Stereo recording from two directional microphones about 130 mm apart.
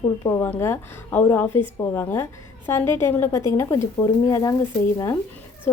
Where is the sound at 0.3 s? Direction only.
20° left (ahead or behind).